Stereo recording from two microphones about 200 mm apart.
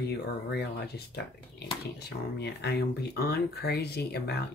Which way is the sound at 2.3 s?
55° left (ahead or behind).